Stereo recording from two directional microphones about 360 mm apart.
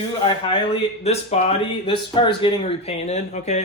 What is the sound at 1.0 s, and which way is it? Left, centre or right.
Speech, centre.